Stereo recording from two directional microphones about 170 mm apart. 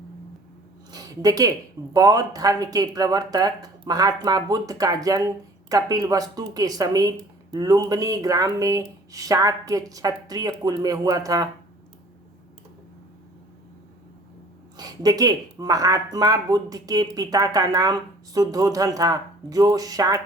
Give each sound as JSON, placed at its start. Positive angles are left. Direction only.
{"t": 0.9, "sound": "speech", "side_deg": -20}
{"t": 14.8, "sound": "speech", "side_deg": -25}